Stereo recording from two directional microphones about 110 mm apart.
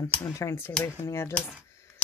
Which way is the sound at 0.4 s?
25° left (ahead or behind).